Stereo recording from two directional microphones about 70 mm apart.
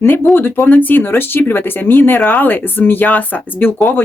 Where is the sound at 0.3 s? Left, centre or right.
Left.